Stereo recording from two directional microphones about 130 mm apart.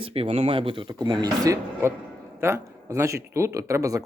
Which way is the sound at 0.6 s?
40° right (ahead or behind).